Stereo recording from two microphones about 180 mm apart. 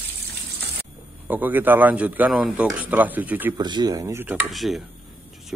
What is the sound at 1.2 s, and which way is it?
A man's voice, 10° right (ahead or behind).